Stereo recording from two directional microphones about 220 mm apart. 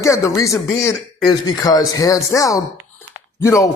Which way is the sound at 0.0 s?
15° left (ahead or behind).